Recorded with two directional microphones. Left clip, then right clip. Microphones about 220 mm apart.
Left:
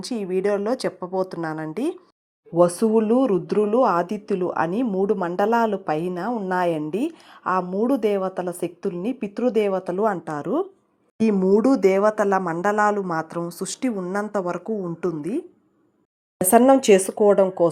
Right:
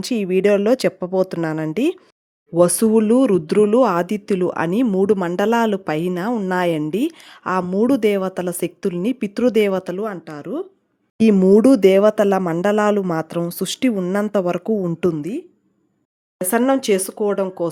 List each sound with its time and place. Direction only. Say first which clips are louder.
0.0 s speech: right 6 dB; 45° right (ahead or behind)
10.0 s speech: left 4 dB; 5° right (ahead or behind)
11.2 s speech: right 6 dB; 45° right (ahead or behind)
16.4 s speech: left 3 dB; centre (ahead or behind)